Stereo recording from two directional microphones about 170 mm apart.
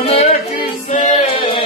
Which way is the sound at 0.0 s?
35° left (ahead or behind).